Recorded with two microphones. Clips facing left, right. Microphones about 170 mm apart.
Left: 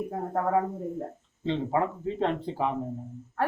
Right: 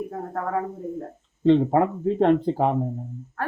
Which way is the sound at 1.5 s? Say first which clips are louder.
Right 9 dB; 55° right (ahead or behind).